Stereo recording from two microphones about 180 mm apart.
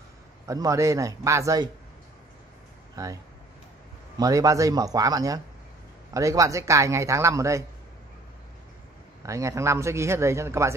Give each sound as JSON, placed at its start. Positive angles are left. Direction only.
{"t": 0.5, "sound": "a man's voice", "side_deg": -15}
{"t": 3.0, "sound": "speech", "side_deg": -20}
{"t": 4.2, "sound": "a man's voice", "side_deg": -20}
{"t": 9.2, "sound": "a man's voice", "side_deg": -15}